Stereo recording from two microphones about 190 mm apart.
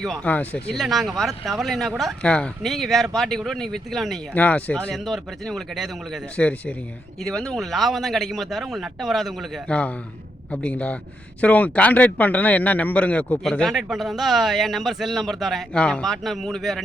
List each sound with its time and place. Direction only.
0.0 s speech: 5° left (ahead or behind)